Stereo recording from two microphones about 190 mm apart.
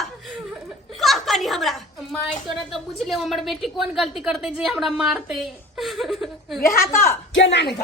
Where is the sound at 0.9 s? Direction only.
Centre (ahead or behind).